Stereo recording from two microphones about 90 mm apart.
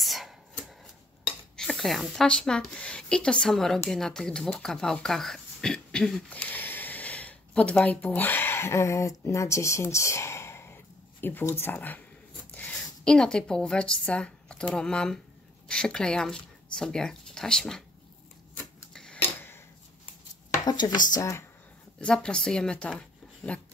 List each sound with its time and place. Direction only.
0.0 s shuffling cards: centre (ahead or behind)
1.2 s speech: 5° left (ahead or behind)
4.9 s a sound: 5° left (ahead or behind); by 11.5 s 20° left (ahead or behind)
11.6 s speech: 20° left (ahead or behind)
20.6 s speech: 50° left (ahead or behind)
21.2 s speech: 35° left (ahead or behind)
21.9 s a woman's voice: 10° left (ahead or behind)